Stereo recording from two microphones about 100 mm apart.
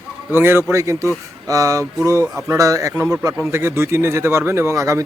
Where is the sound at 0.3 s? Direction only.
20° right (ahead or behind).